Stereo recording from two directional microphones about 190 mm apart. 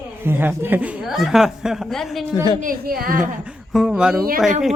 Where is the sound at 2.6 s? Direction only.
50° right (ahead or behind).